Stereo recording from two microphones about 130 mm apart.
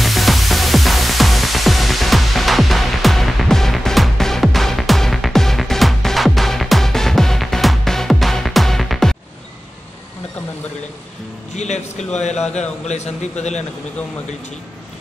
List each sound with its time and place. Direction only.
0.0 s music: centre (ahead or behind)
11.5 s music: 60° left (ahead or behind)
12.2 s a man's voice: 60° left (ahead or behind)